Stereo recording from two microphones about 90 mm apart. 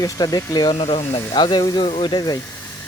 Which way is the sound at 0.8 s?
80° left.